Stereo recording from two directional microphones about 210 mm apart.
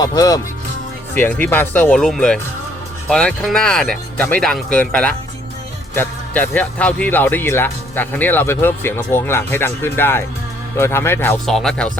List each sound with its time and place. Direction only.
0.0 s speech: 15° left (ahead or behind)